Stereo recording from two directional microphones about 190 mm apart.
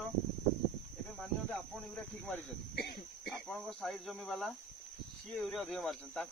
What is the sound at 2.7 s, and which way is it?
Speech, 60° left (ahead or behind).